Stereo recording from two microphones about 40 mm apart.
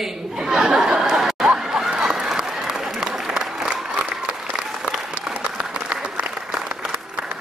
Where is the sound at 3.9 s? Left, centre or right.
Right.